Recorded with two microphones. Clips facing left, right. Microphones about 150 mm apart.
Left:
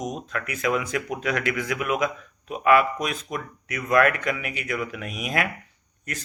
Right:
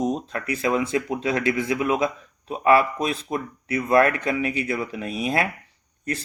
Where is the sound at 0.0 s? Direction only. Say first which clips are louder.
Right 5 dB; 30° right (ahead or behind).